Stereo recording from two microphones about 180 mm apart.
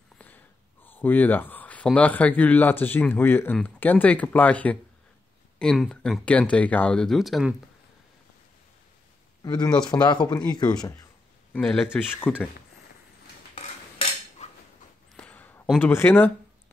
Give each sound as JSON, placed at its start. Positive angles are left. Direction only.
{"t": 0.8, "sound": "speech", "side_deg": 10}
{"t": 9.4, "sound": "speech", "side_deg": 20}
{"t": 11.5, "sound": "speech", "side_deg": 5}
{"t": 13.6, "sound": "cutlery", "side_deg": 35}
{"t": 15.1, "sound": "a sound", "side_deg": 10}
{"t": 15.9, "sound": "speech", "side_deg": 10}